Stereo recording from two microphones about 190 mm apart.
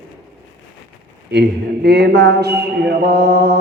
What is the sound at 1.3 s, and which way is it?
A man's voice, 60° right (ahead or behind).